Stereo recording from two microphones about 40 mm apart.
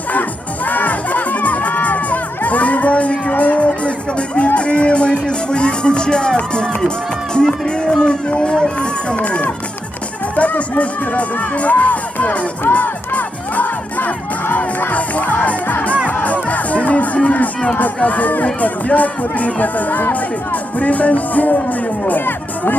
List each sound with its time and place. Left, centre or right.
0.1 s music: left
5.5 s speech: left
9.1 s speech: left
12.7 s music: left
14.9 s speech: left
16.0 s music: left
17.6 s speech: left